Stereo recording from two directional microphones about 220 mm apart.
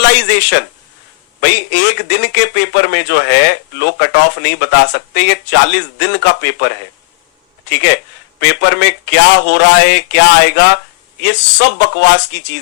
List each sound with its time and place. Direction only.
0.0 s speech: 50° left (ahead or behind)